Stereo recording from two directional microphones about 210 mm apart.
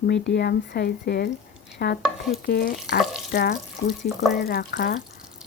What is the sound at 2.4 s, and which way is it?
Speech, 45° left (ahead or behind).